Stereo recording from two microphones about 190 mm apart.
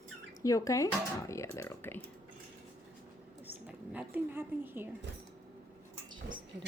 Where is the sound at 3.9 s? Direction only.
10° right (ahead or behind).